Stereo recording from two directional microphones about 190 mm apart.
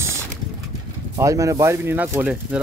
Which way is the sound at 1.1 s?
15° right (ahead or behind).